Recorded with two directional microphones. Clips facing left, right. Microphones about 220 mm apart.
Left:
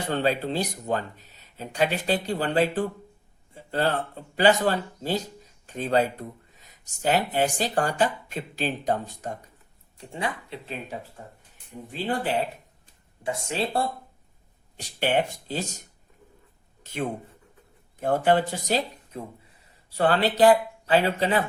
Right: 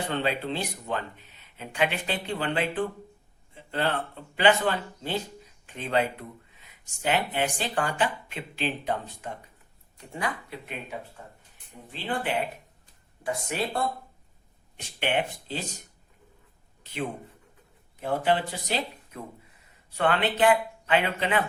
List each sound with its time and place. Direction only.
0.1 s speech: 40° left (ahead or behind)
10.0 s speech: 25° left (ahead or behind)
12.0 s speech: 35° left (ahead or behind)
13.2 s speech: 25° left (ahead or behind)
14.8 s speech: 40° left (ahead or behind)
16.9 s speech: 45° left (ahead or behind)
18.0 s speech: 50° left (ahead or behind)
19.1 s speech: 35° left (ahead or behind)